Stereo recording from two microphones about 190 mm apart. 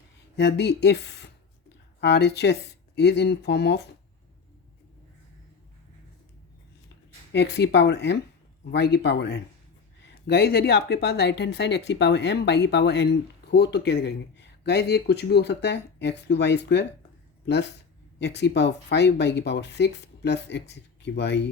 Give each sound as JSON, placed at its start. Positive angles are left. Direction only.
{"t": 0.3, "sound": "speech", "side_deg": 60}
{"t": 7.3, "sound": "speech", "side_deg": 60}